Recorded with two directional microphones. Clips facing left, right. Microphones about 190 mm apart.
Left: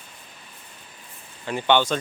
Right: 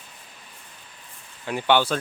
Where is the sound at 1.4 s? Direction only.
5° right (ahead or behind).